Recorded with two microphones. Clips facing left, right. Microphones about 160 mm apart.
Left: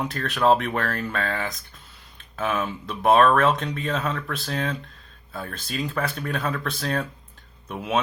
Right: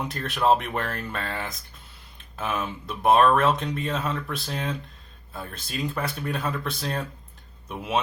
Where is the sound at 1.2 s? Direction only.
55° left (ahead or behind).